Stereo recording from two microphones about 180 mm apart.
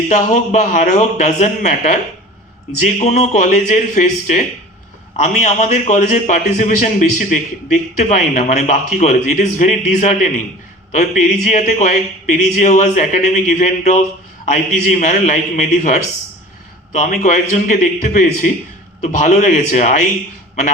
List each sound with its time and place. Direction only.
0.1 s a man's voice: 40° left (ahead or behind)